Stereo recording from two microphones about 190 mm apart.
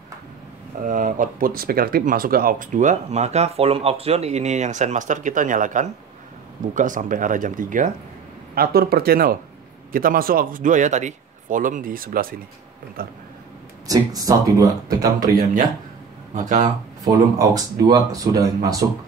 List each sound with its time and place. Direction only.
0.8 s speech: 45° right (ahead or behind)
8.5 s speech: 55° right (ahead or behind)
13.8 s speech: 20° right (ahead or behind)
16.3 s speech: 40° right (ahead or behind)
16.6 s speech: 20° right (ahead or behind)